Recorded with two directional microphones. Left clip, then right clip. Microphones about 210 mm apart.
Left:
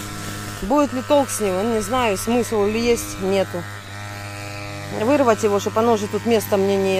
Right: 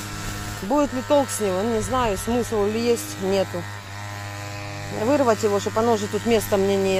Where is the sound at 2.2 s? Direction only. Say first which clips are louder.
Left 3 dB; 50° left (ahead or behind).